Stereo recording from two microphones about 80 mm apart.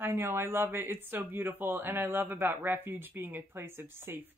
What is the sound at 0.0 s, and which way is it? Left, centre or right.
Speech, right.